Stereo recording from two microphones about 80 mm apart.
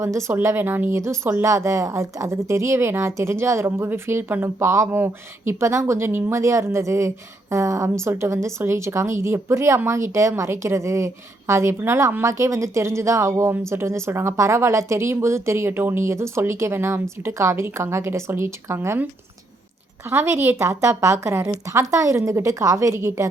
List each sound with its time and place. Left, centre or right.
0.0 s a woman's voice: right
20.1 s a woman's voice: right